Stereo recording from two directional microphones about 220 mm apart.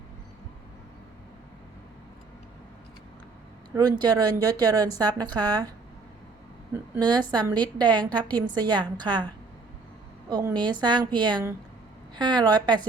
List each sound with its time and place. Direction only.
4.0 s a woman's voice: 20° right (ahead or behind)
6.9 s a woman's voice: 20° right (ahead or behind)
10.2 s a woman's voice: 20° right (ahead or behind)